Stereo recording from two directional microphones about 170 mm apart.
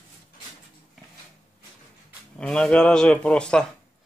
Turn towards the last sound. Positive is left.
turn(degrees=5)  # may be behind; listen again after turning